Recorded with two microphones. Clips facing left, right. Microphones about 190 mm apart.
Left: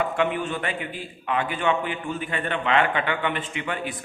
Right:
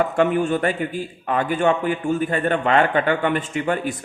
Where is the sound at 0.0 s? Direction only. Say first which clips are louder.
Right 6 dB; 45° right (ahead or behind).